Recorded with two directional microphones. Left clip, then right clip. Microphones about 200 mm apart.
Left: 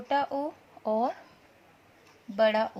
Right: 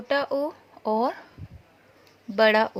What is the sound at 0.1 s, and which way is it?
Speech, 45° right (ahead or behind).